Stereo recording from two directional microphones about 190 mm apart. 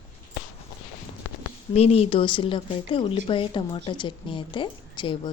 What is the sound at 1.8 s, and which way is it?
Speech, 30° left (ahead or behind).